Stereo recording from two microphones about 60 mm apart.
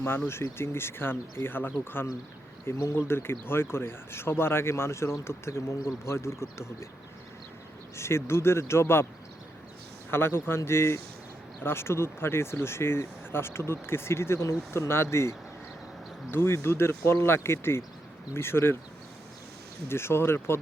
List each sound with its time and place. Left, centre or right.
0.3 s speech: left
7.9 s speech: left
10.1 s speech: left
19.9 s speech: left